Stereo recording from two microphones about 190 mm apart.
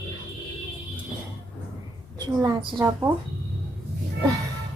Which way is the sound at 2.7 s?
25° right (ahead or behind).